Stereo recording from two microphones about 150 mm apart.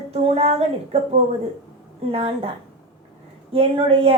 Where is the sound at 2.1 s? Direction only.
40° right (ahead or behind).